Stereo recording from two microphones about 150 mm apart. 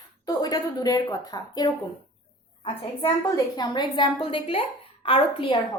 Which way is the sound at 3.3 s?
25° left (ahead or behind).